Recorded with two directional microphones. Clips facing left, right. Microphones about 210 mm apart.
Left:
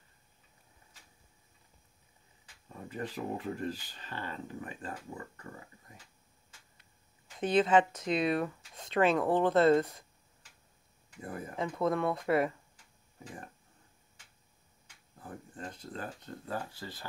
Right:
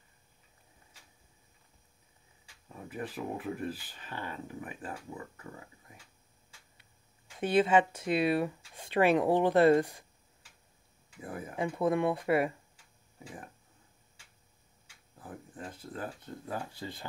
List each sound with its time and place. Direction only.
2.9 s speech: 10° right (ahead or behind)
7.3 s speech: 10° right (ahead or behind)
11.3 s speech: 10° right (ahead or behind)
15.5 s speech: 5° right (ahead or behind)
16.4 s speech: 20° right (ahead or behind)